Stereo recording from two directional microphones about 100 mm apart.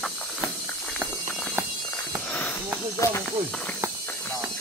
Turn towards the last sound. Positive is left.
turn(degrees=30)  # may be behind; listen again after turning